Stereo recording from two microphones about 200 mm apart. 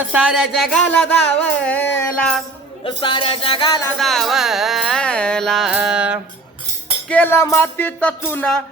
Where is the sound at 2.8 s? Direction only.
25° left (ahead or behind).